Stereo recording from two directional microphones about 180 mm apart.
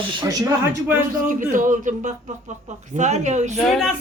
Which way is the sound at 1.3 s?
45° right (ahead or behind).